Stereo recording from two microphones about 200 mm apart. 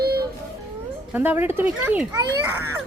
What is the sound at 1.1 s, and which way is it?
A woman's voice, 10° right (ahead or behind).